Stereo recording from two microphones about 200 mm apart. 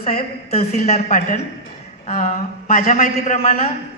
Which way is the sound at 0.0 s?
30° left (ahead or behind).